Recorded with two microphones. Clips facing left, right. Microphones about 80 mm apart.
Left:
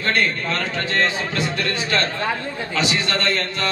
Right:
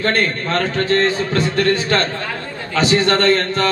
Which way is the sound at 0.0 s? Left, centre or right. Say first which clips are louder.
Right 3 dB; right.